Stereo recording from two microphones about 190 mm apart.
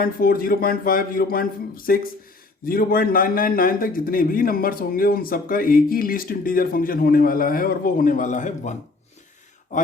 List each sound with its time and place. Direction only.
0.0 s a man's voice: 50° left (ahead or behind)